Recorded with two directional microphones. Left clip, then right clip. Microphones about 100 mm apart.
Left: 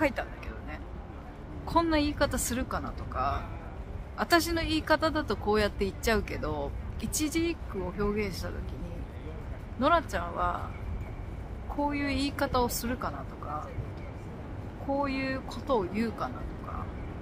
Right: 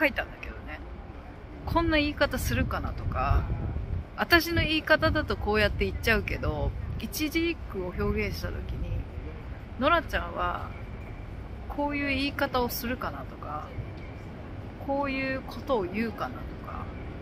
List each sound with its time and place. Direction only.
0.0 s a sound: 20° left (ahead or behind)
1.7 s speech: 30° left (ahead or behind)
9.8 s speech: 25° left (ahead or behind)
11.7 s speech: 25° left (ahead or behind)
15.0 s speech: 25° left (ahead or behind)